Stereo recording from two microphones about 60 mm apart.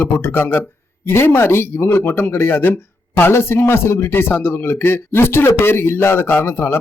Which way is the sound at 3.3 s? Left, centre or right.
Left.